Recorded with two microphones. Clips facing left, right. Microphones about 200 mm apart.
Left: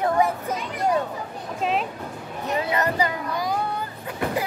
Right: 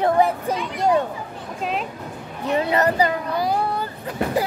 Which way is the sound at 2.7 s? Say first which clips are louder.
Right 5 dB; 35° right (ahead or behind).